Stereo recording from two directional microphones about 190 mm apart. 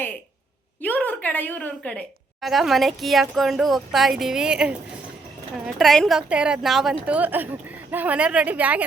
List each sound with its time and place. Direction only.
0.8 s a woman's voice: 10° left (ahead or behind); by 8.8 s 10° right (ahead or behind)